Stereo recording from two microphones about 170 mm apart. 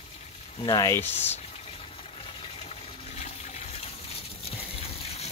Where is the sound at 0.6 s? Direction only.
25° left (ahead or behind).